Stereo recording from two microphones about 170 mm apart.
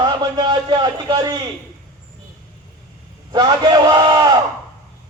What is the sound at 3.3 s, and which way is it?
A man's voice, 25° right (ahead or behind).